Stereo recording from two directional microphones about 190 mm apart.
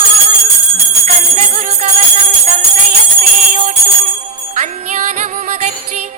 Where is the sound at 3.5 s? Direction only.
40° right (ahead or behind).